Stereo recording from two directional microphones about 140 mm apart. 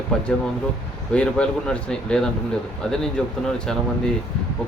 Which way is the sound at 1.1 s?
5° left (ahead or behind).